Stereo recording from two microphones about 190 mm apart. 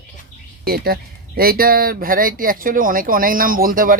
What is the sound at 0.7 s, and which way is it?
Speech, 55° right (ahead or behind).